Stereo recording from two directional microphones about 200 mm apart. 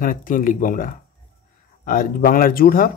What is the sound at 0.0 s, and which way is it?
Speech, 45° left (ahead or behind).